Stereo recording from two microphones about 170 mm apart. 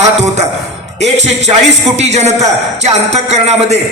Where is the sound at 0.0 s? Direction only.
40° right (ahead or behind).